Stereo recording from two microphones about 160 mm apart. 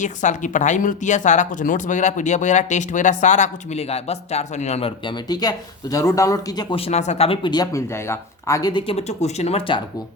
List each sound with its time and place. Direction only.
0.0 s speech: 50° left (ahead or behind); by 9.8 s 35° left (ahead or behind)